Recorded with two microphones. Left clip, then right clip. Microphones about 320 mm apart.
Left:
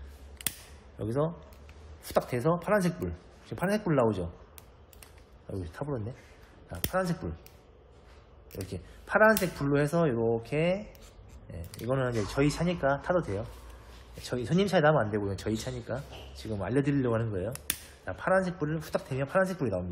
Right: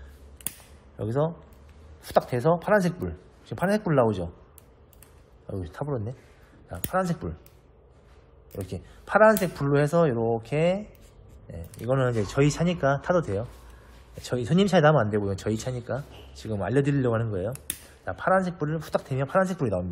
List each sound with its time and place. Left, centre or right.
0.9 s speech: centre
5.6 s speech: centre
8.6 s speech: centre